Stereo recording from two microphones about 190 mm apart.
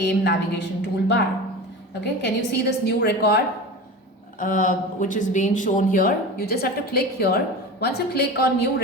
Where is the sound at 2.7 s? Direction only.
60° left (ahead or behind).